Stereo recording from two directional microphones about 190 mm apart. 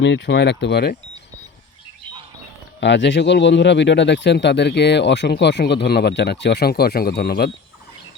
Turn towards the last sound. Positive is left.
turn(degrees=55)  # may be behind; listen again after turning